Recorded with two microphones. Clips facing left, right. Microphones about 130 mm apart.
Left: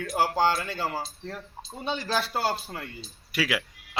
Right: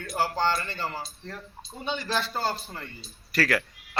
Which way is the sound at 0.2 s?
10° left (ahead or behind).